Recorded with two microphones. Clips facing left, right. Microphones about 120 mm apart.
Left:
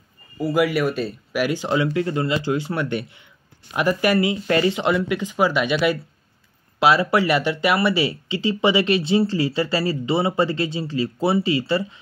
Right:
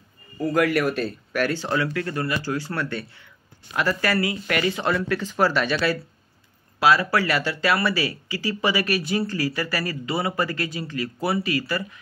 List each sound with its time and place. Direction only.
0.4 s speech: 5° left (ahead or behind); by 12.0 s 25° left (ahead or behind)